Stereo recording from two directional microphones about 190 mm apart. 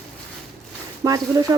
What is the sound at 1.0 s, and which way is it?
Speech, 20° right (ahead or behind).